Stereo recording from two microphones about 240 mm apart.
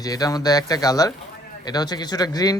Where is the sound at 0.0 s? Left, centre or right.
Centre.